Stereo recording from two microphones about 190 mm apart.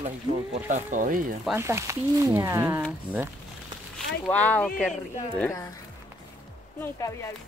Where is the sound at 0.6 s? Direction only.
40° right (ahead or behind).